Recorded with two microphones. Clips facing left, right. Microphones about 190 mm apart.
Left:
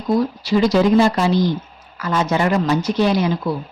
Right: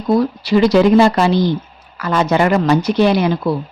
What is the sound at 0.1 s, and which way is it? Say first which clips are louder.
Speech: right 3 dB; 65° right (ahead or behind).